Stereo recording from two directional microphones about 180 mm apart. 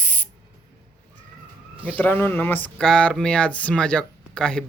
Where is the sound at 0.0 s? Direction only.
10° left (ahead or behind).